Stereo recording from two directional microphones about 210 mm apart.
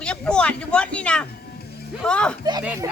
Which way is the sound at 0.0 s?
5° left (ahead or behind).